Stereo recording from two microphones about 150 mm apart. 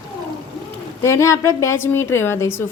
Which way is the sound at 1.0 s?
20° left (ahead or behind).